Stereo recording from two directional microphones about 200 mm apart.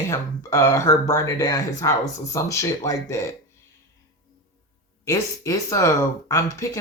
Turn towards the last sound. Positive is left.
turn(degrees=15)  # may be behind; listen again after turning